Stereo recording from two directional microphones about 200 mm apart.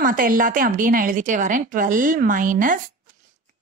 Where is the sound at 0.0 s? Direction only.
45° right (ahead or behind).